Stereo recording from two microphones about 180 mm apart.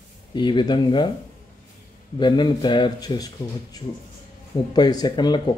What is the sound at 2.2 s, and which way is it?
Speech, 25° left (ahead or behind).